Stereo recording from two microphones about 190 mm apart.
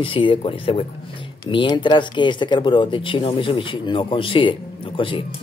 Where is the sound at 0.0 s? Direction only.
25° left (ahead or behind).